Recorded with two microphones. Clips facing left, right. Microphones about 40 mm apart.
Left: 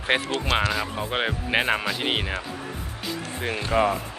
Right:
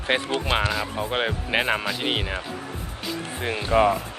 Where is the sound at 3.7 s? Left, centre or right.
Centre.